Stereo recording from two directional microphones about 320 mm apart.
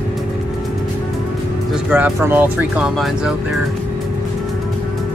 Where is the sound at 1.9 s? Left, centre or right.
Centre.